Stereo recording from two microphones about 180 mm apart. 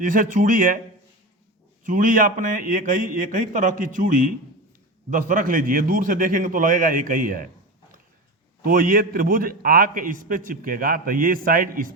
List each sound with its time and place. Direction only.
0.0 s a man's voice: 45° right (ahead or behind)
1.8 s a man's voice: 50° right (ahead or behind)
8.6 s a man's voice: 50° right (ahead or behind)